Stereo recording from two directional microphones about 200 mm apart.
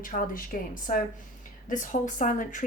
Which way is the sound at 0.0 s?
45° left (ahead or behind).